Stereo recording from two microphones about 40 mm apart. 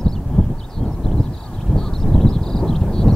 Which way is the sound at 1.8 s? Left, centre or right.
Centre.